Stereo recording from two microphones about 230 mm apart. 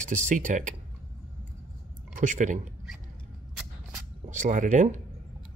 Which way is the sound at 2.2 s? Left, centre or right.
Right.